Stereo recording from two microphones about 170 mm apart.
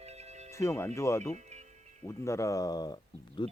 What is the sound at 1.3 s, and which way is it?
Music, 40° right (ahead or behind).